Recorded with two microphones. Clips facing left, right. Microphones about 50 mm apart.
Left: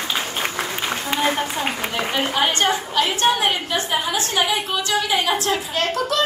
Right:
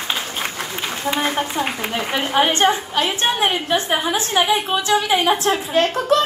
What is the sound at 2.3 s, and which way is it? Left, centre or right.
A woman's voice, right.